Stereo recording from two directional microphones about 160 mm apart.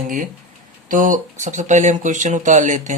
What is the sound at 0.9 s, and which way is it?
Speech, 55° right (ahead or behind).